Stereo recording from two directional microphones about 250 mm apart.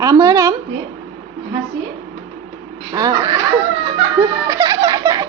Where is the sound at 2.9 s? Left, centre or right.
Centre.